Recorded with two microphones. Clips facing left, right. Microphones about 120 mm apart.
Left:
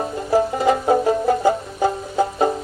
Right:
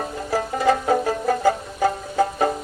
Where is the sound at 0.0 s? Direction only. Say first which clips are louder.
Left 6 dB; 25° left (ahead or behind).